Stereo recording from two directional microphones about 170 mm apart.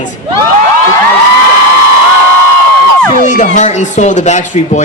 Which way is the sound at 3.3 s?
45° left (ahead or behind).